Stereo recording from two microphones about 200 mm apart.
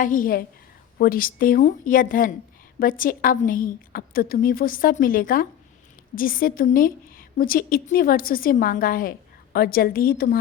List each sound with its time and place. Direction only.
0.0 s a woman's voice: 45° left (ahead or behind)